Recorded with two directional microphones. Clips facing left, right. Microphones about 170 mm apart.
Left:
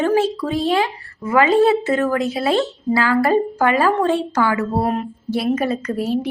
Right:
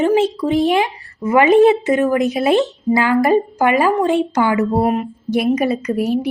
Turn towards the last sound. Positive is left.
turn(degrees=-15)  # may be behind; listen again after turning